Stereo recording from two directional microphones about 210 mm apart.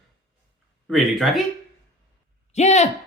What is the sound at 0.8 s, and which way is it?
Speech, centre (ahead or behind).